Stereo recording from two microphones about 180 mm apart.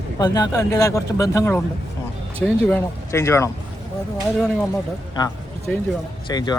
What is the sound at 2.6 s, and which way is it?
Speech, 10° left (ahead or behind).